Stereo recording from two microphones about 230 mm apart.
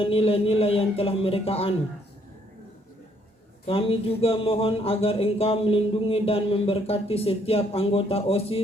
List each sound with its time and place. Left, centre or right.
0.0 s speech: left
3.7 s speech: left